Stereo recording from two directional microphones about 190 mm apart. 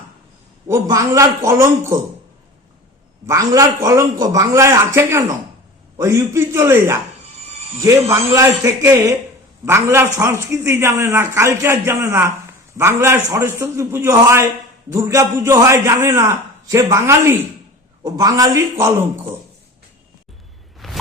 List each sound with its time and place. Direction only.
0.7 s a man's voice: 15° right (ahead or behind)
3.2 s a man's voice: 15° right (ahead or behind)
20.7 s whoosh: centre (ahead or behind)